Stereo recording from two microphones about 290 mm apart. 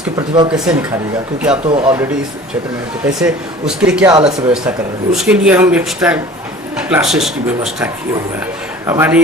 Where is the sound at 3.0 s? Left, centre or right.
Centre.